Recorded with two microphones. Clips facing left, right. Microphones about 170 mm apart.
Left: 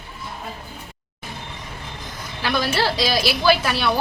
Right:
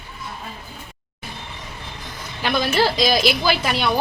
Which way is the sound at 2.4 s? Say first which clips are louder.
Right 2 dB; 15° right (ahead or behind).